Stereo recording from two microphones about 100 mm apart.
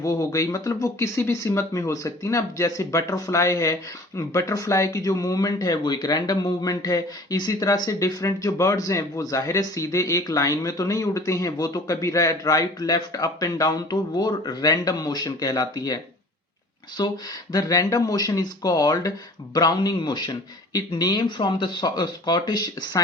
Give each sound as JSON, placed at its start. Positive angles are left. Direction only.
{"t": 0.0, "sound": "speech", "side_deg": 35}
{"t": 17.0, "sound": "speech", "side_deg": 45}